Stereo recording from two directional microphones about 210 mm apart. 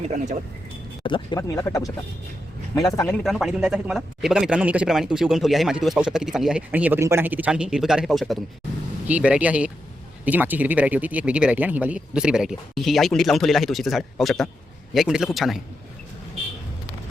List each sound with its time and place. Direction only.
1.0 s speech: 20° left (ahead or behind)
3.2 s speech: centre (ahead or behind)